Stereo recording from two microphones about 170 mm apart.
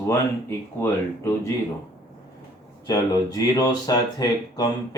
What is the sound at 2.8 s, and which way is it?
Speech, 20° left (ahead or behind).